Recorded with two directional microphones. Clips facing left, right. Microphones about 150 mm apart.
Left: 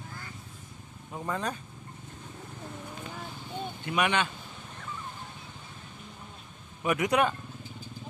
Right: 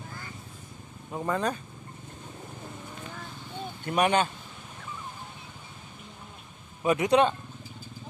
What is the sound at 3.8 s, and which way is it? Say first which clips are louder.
Speech: right 4 dB; 40° right (ahead or behind).